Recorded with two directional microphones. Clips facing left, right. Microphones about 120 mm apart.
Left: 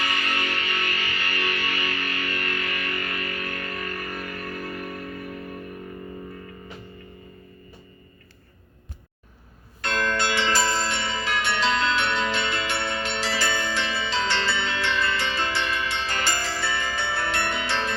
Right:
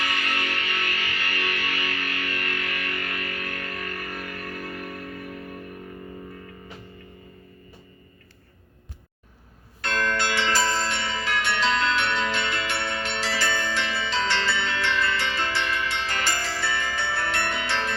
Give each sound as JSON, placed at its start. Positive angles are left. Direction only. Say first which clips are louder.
{"t": 0.0, "sound": "music", "louder": "left 1 dB", "side_deg": 30}
{"t": 9.8, "sound": "bell", "louder": "left 1 dB", "side_deg": 20}